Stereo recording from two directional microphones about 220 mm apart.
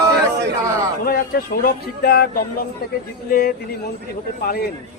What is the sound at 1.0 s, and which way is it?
Speech, 40° left (ahead or behind).